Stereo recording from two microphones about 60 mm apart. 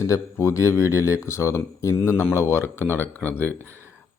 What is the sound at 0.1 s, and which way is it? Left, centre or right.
Speech, left.